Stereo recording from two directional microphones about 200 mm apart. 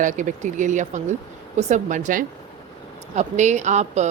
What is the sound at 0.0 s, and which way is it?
A woman's voice, 40° right (ahead or behind).